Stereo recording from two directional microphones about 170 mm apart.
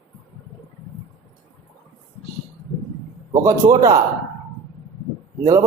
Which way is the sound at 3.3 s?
20° right (ahead or behind).